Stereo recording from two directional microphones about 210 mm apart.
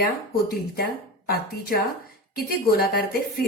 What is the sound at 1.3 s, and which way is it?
Speech, 50° left (ahead or behind).